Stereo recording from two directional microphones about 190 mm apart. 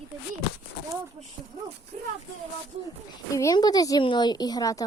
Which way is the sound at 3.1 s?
15° left (ahead or behind).